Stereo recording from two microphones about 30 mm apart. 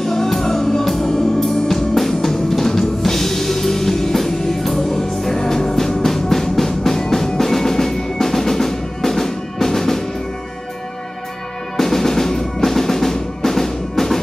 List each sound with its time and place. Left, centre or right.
0.0 s music: centre
11.7 s drum: centre
12.6 s percussion: centre